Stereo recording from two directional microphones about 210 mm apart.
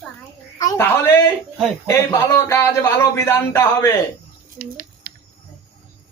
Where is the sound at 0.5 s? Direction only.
15° left (ahead or behind).